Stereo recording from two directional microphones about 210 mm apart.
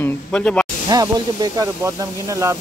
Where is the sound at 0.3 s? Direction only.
5° left (ahead or behind).